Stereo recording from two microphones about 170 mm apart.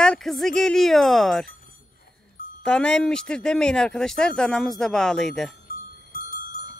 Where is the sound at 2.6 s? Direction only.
5° left (ahead or behind).